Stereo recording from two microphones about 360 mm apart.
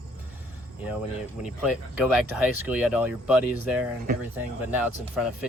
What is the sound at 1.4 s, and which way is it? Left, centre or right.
Speech, centre.